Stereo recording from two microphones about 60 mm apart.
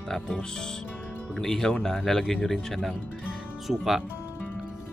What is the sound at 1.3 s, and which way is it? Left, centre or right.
Speech, centre.